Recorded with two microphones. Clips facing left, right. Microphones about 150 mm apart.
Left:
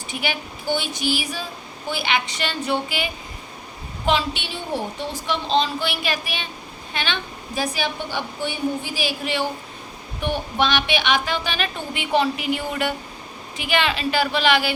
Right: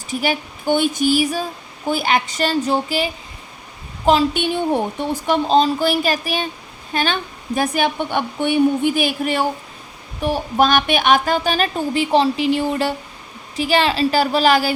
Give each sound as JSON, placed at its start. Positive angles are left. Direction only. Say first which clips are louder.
{"t": 0.1, "sound": "a woman's voice", "louder": "right 7 dB", "side_deg": -40}
{"t": 10.2, "sound": "speech", "louder": "right 5 dB", "side_deg": -35}